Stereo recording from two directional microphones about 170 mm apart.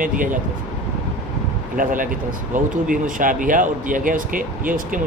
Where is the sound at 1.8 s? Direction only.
50° right (ahead or behind).